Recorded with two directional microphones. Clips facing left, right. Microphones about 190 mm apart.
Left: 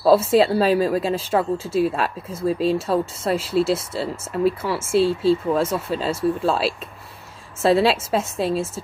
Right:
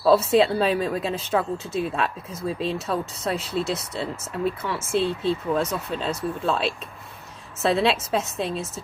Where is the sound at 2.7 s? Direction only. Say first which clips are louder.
Left 6 dB; 30° left (ahead or behind).